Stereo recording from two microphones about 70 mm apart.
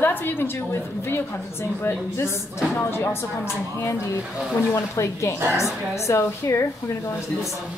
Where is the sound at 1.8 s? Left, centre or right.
Left.